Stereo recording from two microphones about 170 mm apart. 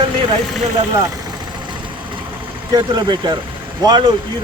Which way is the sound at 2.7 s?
25° right (ahead or behind).